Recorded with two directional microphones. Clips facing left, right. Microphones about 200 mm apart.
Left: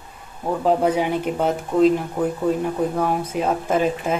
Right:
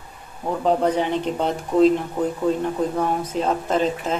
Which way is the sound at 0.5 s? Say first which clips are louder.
Left 1 dB; 5° left (ahead or behind).